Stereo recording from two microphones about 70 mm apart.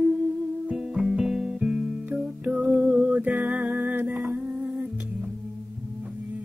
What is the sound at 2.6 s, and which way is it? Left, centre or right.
Music, right.